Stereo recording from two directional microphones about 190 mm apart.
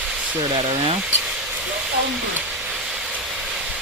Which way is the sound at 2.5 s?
5° right (ahead or behind).